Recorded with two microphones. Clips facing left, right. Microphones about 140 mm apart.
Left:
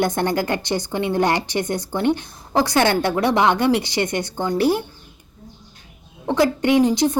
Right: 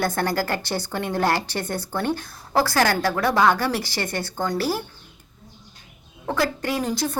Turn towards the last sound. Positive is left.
turn(degrees=15)  # may be behind; listen again after turning